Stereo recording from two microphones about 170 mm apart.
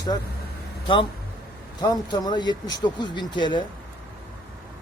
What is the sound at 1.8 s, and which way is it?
Speech, 25° left (ahead or behind).